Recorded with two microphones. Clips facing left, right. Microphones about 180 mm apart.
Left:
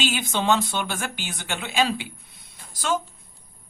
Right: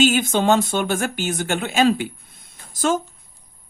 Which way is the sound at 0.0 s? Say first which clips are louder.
Right 8 dB; 45° right (ahead or behind).